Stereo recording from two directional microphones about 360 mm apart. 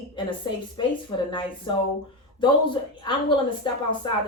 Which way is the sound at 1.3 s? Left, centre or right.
Centre.